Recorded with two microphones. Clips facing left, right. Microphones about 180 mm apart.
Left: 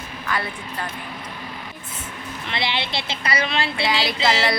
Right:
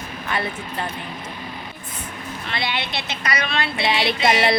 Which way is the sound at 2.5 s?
25° left (ahead or behind).